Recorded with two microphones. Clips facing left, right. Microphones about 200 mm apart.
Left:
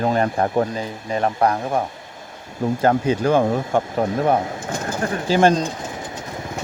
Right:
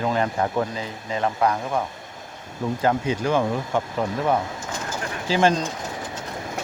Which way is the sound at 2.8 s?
40° left (ahead or behind).